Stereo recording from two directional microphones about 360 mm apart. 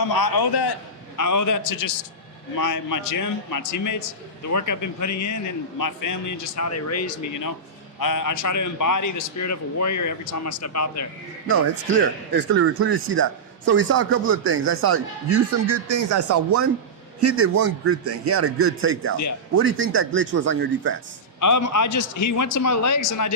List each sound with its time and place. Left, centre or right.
0.0 s a man's voice: left
1.1 s a man's voice: left
11.9 s speech: right
21.4 s a man's voice: left